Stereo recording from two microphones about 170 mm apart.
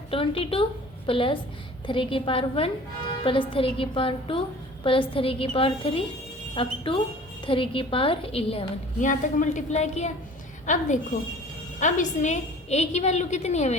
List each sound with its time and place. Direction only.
0.1 s a woman's voice: 35° left (ahead or behind)